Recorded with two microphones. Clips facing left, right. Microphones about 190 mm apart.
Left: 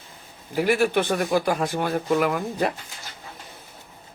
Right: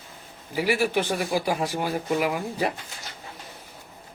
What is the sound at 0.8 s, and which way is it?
Speech, 60° left (ahead or behind).